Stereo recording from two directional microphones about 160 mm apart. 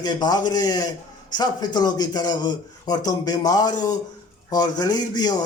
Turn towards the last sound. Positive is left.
turn(degrees=25)  # may be behind; listen again after turning